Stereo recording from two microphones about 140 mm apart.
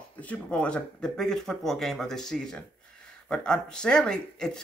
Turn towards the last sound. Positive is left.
turn(degrees=5)  # may be behind; listen again after turning